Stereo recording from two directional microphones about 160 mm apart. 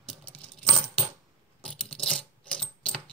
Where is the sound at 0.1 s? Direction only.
5° left (ahead or behind).